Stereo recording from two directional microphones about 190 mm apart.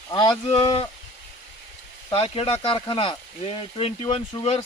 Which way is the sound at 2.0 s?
30° left (ahead or behind).